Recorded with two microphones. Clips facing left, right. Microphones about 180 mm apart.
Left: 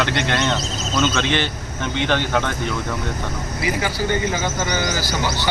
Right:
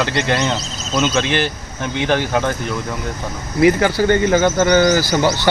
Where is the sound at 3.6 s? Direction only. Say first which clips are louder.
Right 9 dB; 60° right (ahead or behind).